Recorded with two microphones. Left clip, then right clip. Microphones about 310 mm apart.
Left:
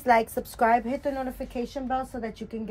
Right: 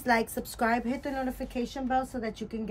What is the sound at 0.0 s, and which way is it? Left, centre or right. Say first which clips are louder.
A woman's voice: left 5 dB; centre.